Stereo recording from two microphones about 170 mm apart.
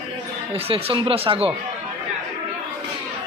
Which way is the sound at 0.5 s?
35° right (ahead or behind).